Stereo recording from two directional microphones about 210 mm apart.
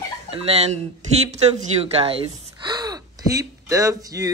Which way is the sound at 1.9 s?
25° right (ahead or behind).